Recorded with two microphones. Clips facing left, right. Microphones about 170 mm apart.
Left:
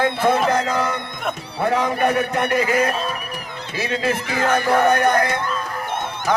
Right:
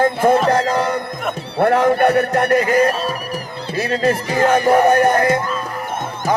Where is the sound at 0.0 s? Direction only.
40° right (ahead or behind).